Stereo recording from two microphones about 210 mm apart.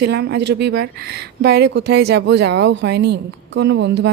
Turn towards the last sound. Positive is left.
turn(degrees=-55)  # may be behind; listen again after turning